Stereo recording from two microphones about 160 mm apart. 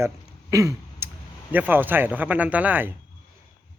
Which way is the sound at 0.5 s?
20° right (ahead or behind).